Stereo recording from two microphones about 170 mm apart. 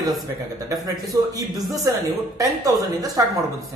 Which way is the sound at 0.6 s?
20° right (ahead or behind).